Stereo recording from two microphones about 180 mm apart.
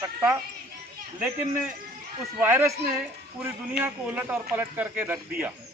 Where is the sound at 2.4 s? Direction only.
15° right (ahead or behind).